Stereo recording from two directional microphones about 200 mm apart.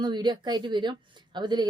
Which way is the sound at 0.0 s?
20° right (ahead or behind).